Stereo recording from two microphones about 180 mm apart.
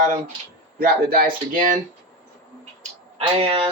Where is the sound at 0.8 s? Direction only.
55° right (ahead or behind).